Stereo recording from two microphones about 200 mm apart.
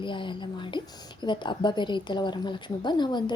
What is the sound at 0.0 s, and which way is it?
A woman's voice, 25° left (ahead or behind).